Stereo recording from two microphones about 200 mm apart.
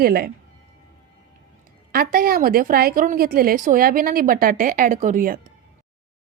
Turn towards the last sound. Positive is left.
turn(degrees=-40)  # may be behind; listen again after turning